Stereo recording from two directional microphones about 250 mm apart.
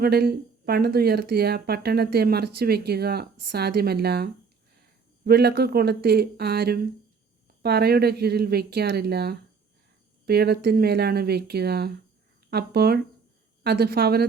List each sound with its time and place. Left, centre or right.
0.0 s speech: right